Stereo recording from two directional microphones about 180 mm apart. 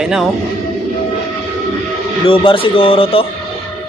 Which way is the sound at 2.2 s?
30° left (ahead or behind).